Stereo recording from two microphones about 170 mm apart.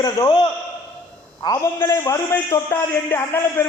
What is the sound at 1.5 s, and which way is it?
A man's voice, 15° left (ahead or behind).